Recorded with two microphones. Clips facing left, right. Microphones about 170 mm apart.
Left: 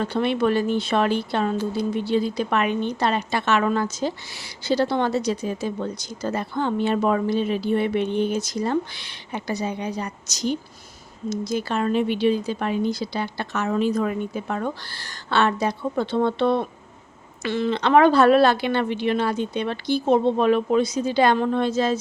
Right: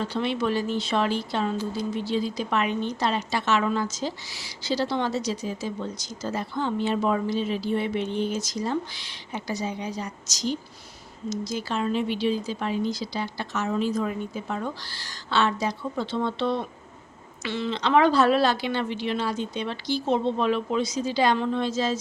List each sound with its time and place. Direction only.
0.0 s speech: 55° left (ahead or behind)